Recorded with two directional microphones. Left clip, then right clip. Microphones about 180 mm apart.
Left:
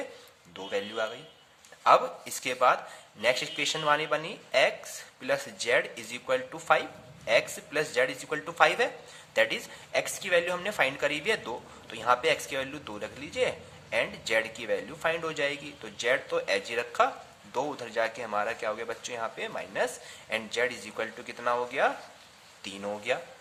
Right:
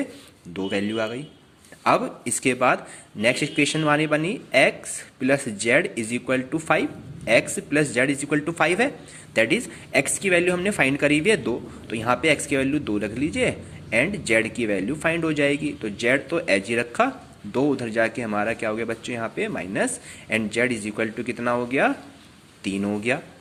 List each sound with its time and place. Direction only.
0.5 s a man's voice: 20° right (ahead or behind)